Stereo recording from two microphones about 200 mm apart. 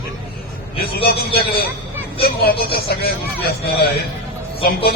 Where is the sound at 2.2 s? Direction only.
50° left (ahead or behind).